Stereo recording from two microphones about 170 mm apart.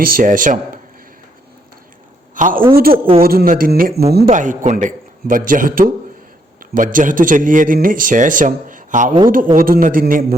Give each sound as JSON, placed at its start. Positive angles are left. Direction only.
{"t": 0.0, "sound": "a man's voice", "side_deg": -55}
{"t": 2.3, "sound": "a man's voice", "side_deg": -50}
{"t": 2.7, "sound": "speech", "side_deg": -60}
{"t": 4.3, "sound": "a man's voice", "side_deg": -50}